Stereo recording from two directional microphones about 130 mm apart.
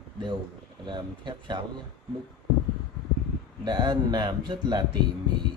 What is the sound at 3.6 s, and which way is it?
Speech, 35° right (ahead or behind).